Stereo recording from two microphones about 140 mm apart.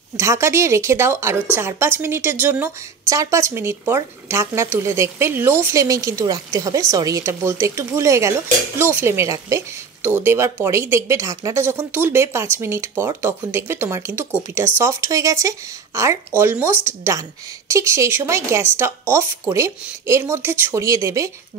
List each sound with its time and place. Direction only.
0.2 s a woman's voice: 20° right (ahead or behind)